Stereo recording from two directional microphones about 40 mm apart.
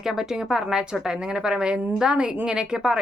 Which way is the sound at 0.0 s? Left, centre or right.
Centre.